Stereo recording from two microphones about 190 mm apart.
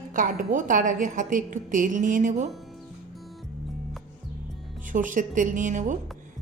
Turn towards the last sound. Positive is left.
turn(degrees=-40)  # may be behind; listen again after turning